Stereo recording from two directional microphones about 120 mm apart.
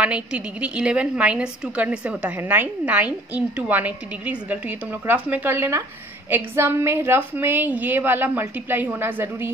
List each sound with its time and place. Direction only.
0.0 s a woman's voice: 10° right (ahead or behind)